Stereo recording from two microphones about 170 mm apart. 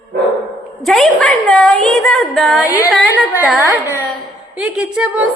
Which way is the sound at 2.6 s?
20° left (ahead or behind).